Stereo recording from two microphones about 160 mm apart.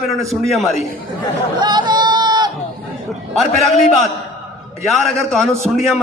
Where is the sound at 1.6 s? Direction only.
25° right (ahead or behind).